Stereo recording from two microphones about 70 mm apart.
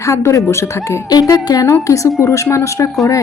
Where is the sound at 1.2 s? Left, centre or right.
Left.